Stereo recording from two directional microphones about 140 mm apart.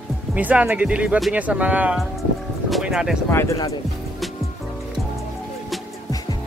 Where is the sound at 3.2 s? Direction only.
20° left (ahead or behind).